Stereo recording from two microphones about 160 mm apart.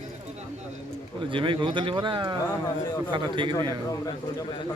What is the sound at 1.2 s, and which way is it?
A man's voice, 30° right (ahead or behind).